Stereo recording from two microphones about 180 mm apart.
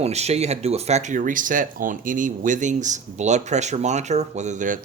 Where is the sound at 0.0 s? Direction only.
35° right (ahead or behind).